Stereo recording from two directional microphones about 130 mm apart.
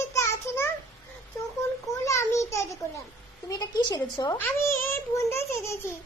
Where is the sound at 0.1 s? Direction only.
20° left (ahead or behind).